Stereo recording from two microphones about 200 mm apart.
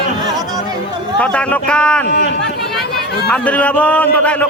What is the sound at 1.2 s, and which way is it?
Speech, 5° left (ahead or behind).